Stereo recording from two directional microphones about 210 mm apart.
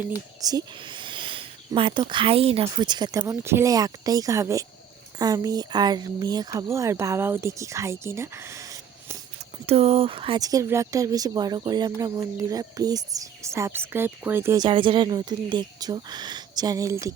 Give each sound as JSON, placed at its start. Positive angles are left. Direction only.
{"t": 0.4, "sound": "speech", "side_deg": -20}
{"t": 9.6, "sound": "speech", "side_deg": -30}